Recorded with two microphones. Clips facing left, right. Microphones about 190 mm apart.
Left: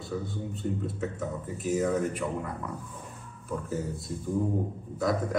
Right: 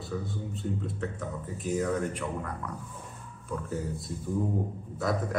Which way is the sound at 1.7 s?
5° left (ahead or behind).